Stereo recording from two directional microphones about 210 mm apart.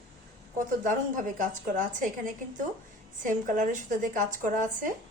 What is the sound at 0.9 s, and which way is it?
Speech, 40° right (ahead or behind).